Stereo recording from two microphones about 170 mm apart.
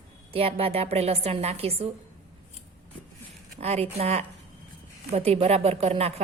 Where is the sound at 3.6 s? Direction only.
35° right (ahead or behind).